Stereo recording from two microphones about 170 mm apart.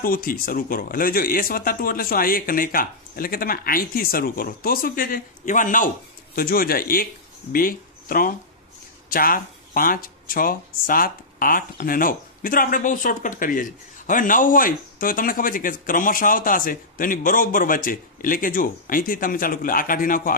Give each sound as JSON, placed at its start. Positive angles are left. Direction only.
{"t": 0.0, "sound": "speech", "side_deg": 55}
{"t": 6.3, "sound": "speech", "side_deg": 60}